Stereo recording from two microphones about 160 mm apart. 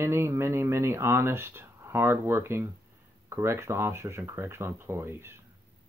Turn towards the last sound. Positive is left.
turn(degrees=-15)  # may be behind; listen again after turning